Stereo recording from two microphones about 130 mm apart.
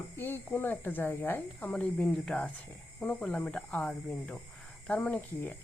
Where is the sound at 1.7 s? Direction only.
5° left (ahead or behind).